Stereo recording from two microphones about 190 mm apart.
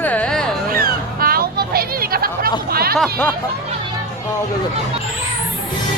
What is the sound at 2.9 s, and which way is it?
Speech, 10° left (ahead or behind).